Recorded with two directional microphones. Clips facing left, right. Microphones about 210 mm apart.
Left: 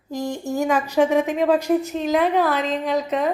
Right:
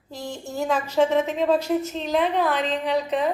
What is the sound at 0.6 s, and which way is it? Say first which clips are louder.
A woman's voice: left 2 dB; 10° left (ahead or behind).